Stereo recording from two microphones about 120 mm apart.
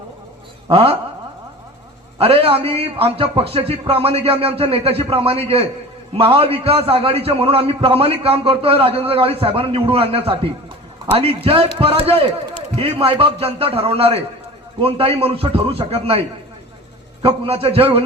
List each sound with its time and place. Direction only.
0.7 s a man's voice: 50° right (ahead or behind)
2.1 s a man's voice: 50° right (ahead or behind)
17.2 s a man's voice: 50° right (ahead or behind)